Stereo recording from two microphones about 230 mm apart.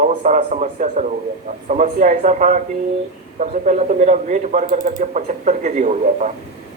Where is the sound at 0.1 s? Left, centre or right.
Right.